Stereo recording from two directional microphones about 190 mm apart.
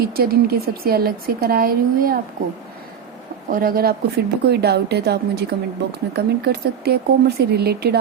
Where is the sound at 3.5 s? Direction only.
50° right (ahead or behind).